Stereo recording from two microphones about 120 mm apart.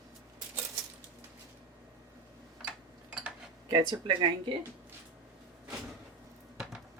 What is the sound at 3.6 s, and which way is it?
Speech, 40° right (ahead or behind).